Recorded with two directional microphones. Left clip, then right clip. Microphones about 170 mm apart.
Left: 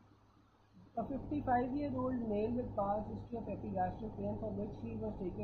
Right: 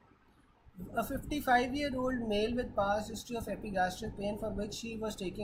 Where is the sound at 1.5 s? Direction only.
30° right (ahead or behind).